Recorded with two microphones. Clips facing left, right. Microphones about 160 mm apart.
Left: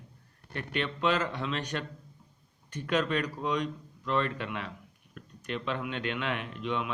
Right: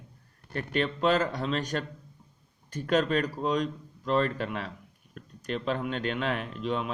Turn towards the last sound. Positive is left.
turn(degrees=-35)  # may be behind; listen again after turning